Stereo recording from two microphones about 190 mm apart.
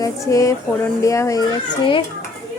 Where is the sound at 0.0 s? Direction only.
15° left (ahead or behind).